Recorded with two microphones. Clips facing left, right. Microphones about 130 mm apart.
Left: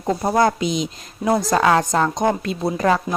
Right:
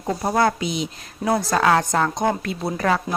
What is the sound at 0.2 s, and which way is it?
Speech, 20° left (ahead or behind).